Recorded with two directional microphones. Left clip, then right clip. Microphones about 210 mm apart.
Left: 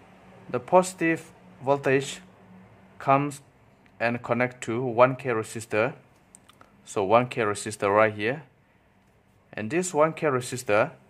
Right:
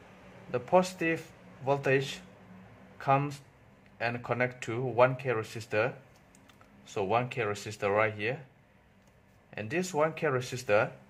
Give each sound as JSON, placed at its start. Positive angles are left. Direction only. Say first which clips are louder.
{"t": 0.5, "sound": "speech", "louder": "left 5 dB", "side_deg": 20}
{"t": 9.5, "sound": "speech", "louder": "left 5 dB", "side_deg": 20}